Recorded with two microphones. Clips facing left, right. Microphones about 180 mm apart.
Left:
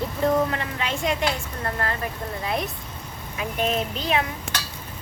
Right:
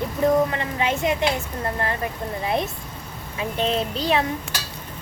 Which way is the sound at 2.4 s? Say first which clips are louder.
Right 4 dB; 25° right (ahead or behind).